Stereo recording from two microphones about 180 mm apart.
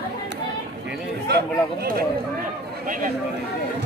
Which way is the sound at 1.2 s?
65° right (ahead or behind).